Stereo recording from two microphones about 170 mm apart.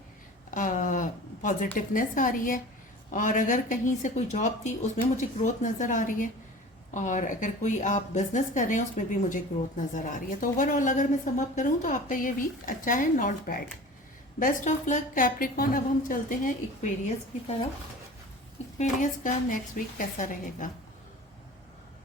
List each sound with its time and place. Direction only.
0.5 s a sound: 50° left (ahead or behind)
3.1 s a woman's voice: 50° left (ahead or behind)
18.8 s a woman's voice: 50° left (ahead or behind)